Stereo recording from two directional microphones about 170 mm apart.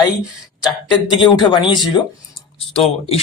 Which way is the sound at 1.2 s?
30° left (ahead or behind).